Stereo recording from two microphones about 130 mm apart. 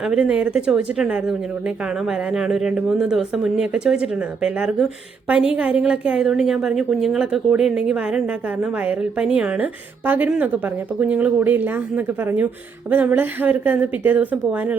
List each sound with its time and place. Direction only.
0.0 s speech: 5° right (ahead or behind)